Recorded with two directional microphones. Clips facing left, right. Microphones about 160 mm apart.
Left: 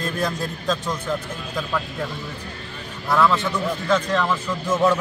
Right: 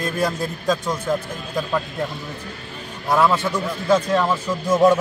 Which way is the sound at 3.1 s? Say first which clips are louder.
Right 1 dB; 15° right (ahead or behind).